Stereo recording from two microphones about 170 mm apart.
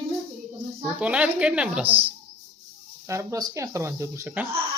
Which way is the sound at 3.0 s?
15° right (ahead or behind).